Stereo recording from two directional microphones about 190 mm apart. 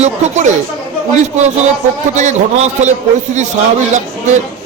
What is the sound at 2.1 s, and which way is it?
A man's voice, 40° right (ahead or behind).